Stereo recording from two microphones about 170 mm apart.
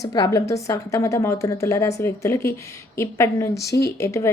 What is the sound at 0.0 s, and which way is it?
A woman's voice, 20° left (ahead or behind).